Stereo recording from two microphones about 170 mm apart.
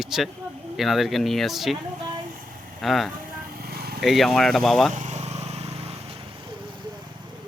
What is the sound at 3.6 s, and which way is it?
Vehicle, 65° right (ahead or behind).